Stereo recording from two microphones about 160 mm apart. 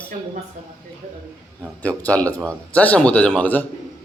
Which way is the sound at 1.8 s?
10° left (ahead or behind).